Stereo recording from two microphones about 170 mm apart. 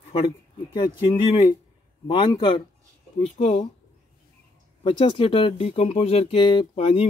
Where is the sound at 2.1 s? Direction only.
30° left (ahead or behind).